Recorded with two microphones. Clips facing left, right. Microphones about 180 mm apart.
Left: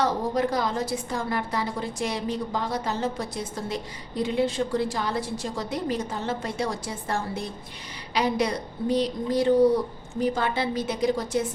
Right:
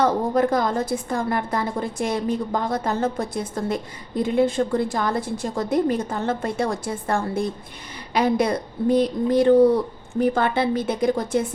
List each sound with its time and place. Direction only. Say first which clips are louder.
0.0 s a woman's voice: right 5 dB; 50° right (ahead or behind)